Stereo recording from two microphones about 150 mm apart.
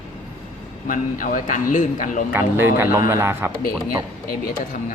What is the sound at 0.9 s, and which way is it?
A man's voice, 60° left (ahead or behind).